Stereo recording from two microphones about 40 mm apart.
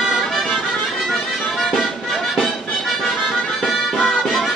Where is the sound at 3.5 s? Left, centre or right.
Centre.